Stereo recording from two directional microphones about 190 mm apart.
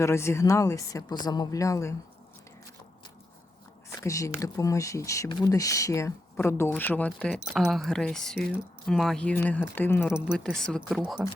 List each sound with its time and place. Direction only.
0.0 s speech: 15° left (ahead or behind)
3.8 s speech: 15° left (ahead or behind)
10.1 s speech: 5° right (ahead or behind)